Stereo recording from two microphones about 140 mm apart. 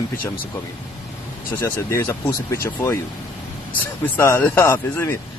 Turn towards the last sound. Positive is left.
turn(degrees=15)  # may be behind; listen again after turning